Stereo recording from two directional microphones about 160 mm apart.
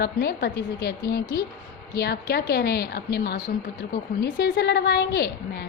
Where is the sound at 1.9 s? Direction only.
85° left.